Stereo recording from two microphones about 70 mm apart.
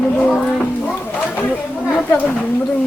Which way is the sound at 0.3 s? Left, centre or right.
Centre.